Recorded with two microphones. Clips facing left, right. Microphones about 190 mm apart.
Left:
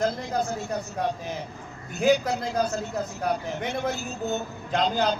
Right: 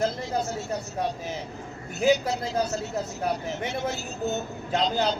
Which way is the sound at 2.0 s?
55° left (ahead or behind).